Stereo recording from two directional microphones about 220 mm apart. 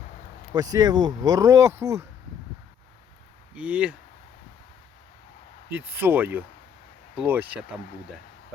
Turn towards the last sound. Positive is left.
turn(degrees=-10)  # may be behind; listen again after turning